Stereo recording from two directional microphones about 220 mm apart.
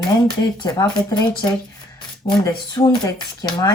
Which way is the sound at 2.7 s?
20° left (ahead or behind).